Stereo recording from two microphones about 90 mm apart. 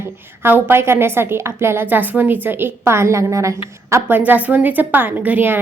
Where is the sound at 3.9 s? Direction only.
20° right (ahead or behind).